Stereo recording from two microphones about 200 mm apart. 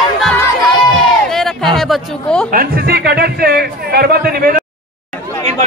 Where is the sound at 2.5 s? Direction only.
50° right (ahead or behind).